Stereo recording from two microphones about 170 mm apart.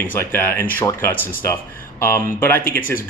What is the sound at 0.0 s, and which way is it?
Speech, 10° left (ahead or behind).